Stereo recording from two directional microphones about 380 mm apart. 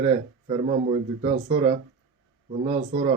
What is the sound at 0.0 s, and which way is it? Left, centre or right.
Speech, centre.